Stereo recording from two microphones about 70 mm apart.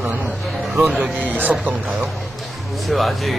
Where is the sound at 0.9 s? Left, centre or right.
Right.